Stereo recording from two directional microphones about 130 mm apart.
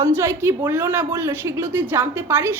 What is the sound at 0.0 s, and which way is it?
A woman's voice, 20° right (ahead or behind).